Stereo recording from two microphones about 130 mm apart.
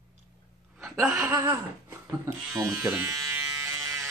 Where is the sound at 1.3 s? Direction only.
25° right (ahead or behind).